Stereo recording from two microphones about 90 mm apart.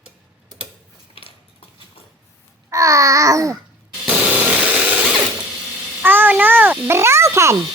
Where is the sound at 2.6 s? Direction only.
35° right (ahead or behind).